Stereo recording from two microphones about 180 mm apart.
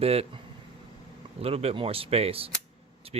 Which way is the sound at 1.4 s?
35° right (ahead or behind).